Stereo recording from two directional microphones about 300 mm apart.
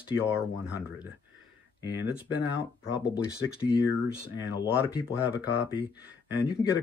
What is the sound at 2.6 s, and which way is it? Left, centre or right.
Speech, left.